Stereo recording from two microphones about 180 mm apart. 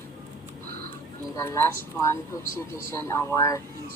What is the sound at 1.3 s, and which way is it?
Speech, 15° left (ahead or behind).